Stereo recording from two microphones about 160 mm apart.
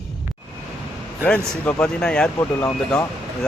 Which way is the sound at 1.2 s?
10° left (ahead or behind).